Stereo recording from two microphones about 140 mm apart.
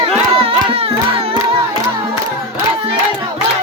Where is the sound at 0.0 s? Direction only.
40° right (ahead or behind).